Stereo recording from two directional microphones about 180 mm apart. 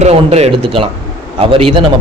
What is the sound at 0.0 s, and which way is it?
A man's voice, 35° right (ahead or behind).